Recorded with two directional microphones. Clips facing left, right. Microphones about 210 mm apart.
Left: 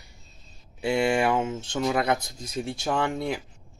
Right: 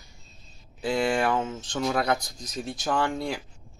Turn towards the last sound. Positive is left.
turn(degrees=5)  # may be behind; listen again after turning